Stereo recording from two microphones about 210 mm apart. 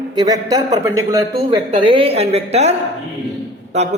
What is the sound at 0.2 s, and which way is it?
Speech, 15° right (ahead or behind).